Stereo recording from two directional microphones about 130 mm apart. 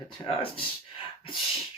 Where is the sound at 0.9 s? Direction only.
45° left (ahead or behind).